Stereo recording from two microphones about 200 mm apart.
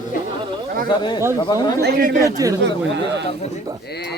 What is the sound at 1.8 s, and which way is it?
Speech, 50° right (ahead or behind).